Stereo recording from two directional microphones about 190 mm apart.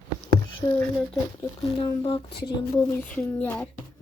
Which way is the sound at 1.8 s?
25° left (ahead or behind).